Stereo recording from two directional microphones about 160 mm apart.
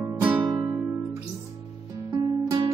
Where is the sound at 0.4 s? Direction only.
25° right (ahead or behind).